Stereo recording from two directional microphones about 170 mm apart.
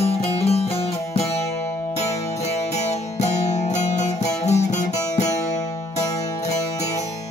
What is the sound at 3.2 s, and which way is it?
Music, 40° left (ahead or behind).